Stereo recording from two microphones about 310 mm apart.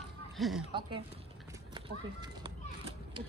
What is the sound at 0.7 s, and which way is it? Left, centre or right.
Speech, centre.